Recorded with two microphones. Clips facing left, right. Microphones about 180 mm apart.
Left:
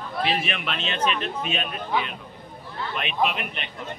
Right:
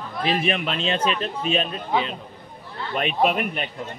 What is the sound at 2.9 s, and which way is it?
Speech, 45° right (ahead or behind).